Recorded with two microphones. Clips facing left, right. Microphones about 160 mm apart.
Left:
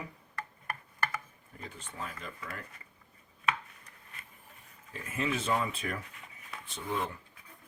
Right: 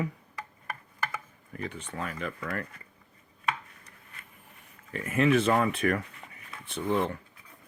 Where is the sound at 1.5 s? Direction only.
70° right (ahead or behind).